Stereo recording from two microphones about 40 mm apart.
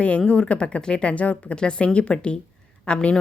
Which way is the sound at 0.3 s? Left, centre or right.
Left.